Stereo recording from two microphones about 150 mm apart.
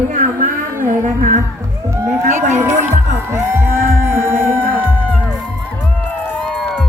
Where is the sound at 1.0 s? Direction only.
60° right (ahead or behind).